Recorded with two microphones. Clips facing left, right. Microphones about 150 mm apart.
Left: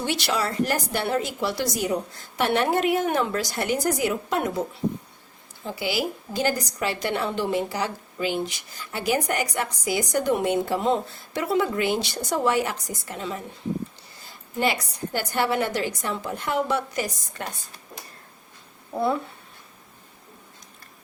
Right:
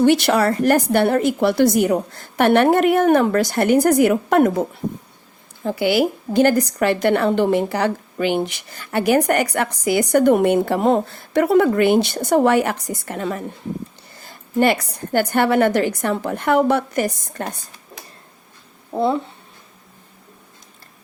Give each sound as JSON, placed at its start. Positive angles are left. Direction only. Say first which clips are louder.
{"t": 0.0, "sound": "a woman's voice", "louder": "right 11 dB", "side_deg": -55}
{"t": 5.6, "sound": "a woman's voice", "louder": "right 9 dB", "side_deg": -60}
{"t": 18.9, "sound": "speech", "louder": "right 5 dB", "side_deg": -25}